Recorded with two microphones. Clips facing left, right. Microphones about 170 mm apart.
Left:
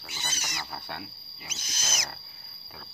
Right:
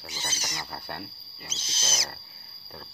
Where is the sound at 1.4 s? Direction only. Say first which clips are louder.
Right 2 dB; 25° right (ahead or behind).